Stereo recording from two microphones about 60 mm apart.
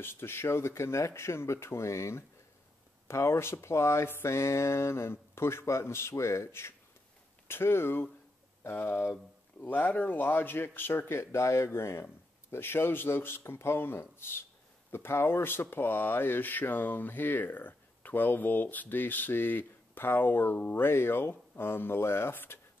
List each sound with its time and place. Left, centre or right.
0.0 s speech: left